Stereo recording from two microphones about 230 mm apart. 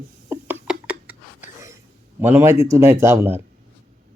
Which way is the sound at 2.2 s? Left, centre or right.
Centre.